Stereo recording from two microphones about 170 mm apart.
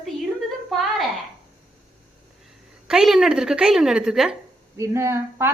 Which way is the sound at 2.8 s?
Centre (ahead or behind).